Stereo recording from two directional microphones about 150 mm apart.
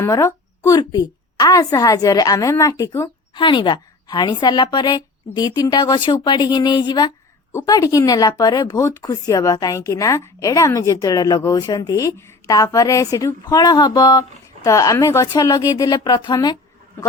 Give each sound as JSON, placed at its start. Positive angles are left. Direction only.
{"t": 0.0, "sound": "speech", "side_deg": 20}
{"t": 3.3, "sound": "speech", "side_deg": 30}